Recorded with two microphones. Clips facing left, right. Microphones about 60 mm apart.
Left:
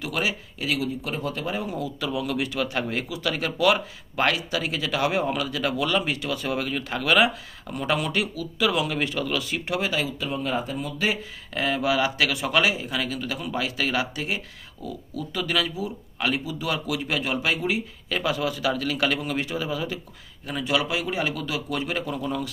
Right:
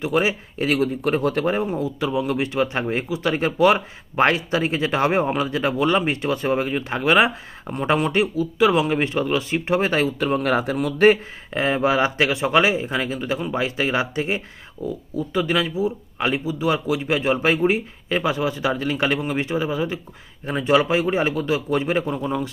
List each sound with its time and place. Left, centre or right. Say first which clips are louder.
0.0 s a man's voice: right 7 dB; right
0.7 s a man's voice: right 7 dB; right
11.5 s a man's voice: right 4 dB; right